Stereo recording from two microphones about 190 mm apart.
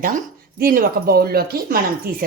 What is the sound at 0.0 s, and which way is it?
Speech, 50° right (ahead or behind).